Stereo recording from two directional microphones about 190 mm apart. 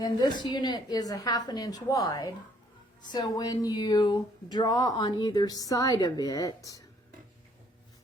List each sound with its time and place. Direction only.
0.0 s speech: 20° left (ahead or behind)